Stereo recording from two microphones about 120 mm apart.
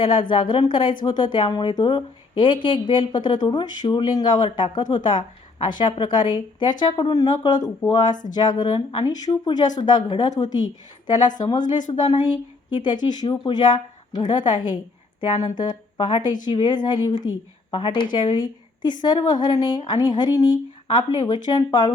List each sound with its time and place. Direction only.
0.0 s speech: 45° left (ahead or behind)
12.7 s speech: 40° left (ahead or behind)